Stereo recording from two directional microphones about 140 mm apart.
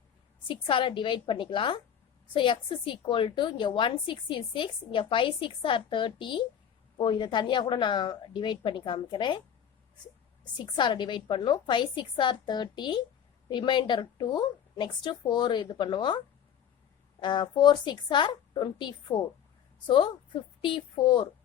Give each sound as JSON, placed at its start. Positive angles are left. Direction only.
{"t": 0.4, "sound": "a woman's voice", "side_deg": 35}
{"t": 10.4, "sound": "a woman's voice", "side_deg": 35}